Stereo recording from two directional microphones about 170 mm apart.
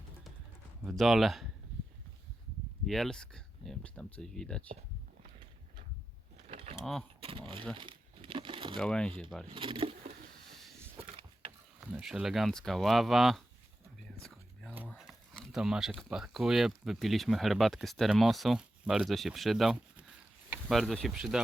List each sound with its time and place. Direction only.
0.9 s speech: centre (ahead or behind)
2.8 s speech: centre (ahead or behind)
6.5 s a sound: 40° right (ahead or behind)
6.7 s speech: centre (ahead or behind)
7.2 s speech: 30° right (ahead or behind)
7.8 s crumpling: 30° right (ahead or behind)
8.8 s speech: 5° left (ahead or behind)
9.5 s speech: 30° right (ahead or behind)
11.8 s speech: 10° right (ahead or behind)
14.2 s whispering: 5° left (ahead or behind)
14.8 s speech: centre (ahead or behind)